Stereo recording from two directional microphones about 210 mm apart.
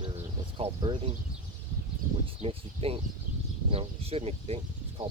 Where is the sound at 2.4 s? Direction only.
30° right (ahead or behind).